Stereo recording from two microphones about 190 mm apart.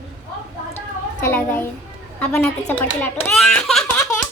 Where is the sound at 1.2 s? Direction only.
10° left (ahead or behind).